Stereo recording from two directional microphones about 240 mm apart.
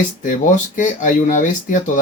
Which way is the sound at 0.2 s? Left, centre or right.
Left.